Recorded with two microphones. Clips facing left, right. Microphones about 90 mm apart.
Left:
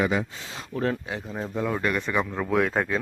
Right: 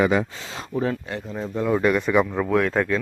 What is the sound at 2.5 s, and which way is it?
Speech, 5° left (ahead or behind).